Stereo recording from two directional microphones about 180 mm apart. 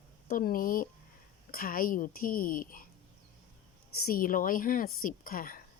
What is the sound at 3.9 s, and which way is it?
Speech, 55° left (ahead or behind).